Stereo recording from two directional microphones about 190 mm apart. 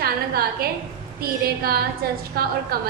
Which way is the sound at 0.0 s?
50° right (ahead or behind).